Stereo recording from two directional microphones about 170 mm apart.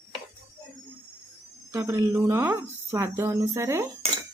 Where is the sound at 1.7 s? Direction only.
15° right (ahead or behind).